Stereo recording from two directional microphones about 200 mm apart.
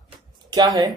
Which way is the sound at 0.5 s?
20° right (ahead or behind).